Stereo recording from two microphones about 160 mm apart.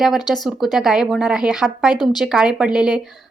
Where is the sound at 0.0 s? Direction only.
Centre (ahead or behind).